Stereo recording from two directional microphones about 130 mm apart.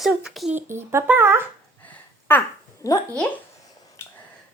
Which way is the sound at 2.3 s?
20° left (ahead or behind).